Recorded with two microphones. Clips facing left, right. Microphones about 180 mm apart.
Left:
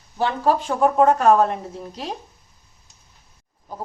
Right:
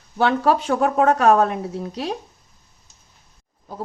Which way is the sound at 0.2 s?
75° right (ahead or behind).